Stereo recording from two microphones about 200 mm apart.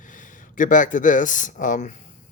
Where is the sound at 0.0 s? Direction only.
40° left (ahead or behind).